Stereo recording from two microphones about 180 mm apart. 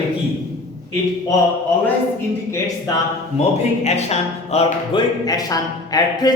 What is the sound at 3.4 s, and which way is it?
Speech, 35° left (ahead or behind).